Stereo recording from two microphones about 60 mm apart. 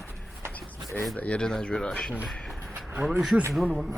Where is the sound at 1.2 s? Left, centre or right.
Centre.